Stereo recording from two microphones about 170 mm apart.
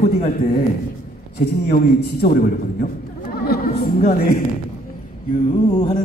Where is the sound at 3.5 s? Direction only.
60° left (ahead or behind).